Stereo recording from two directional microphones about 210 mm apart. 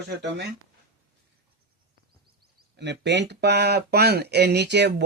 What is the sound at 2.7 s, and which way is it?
Speech, 55° right (ahead or behind).